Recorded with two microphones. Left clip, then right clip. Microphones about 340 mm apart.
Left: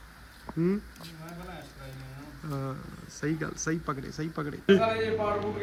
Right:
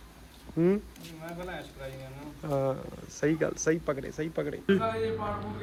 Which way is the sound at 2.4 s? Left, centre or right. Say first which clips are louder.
Right 9 dB; right.